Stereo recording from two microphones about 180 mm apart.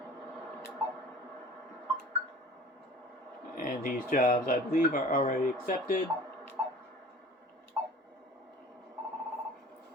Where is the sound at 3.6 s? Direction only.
50° left (ahead or behind).